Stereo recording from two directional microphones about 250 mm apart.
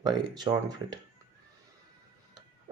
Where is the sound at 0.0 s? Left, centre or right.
Centre.